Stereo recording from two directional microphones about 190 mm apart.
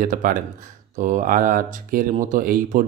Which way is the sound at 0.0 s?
45° right (ahead or behind).